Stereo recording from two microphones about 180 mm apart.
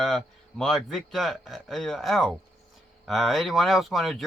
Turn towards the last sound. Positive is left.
turn(degrees=0)  # may be behind; listen again after turning